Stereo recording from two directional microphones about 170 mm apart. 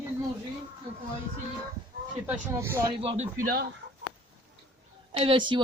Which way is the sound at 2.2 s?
10° right (ahead or behind).